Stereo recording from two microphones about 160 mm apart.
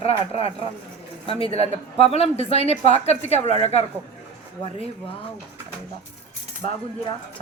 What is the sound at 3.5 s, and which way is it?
Speech, 40° right (ahead or behind).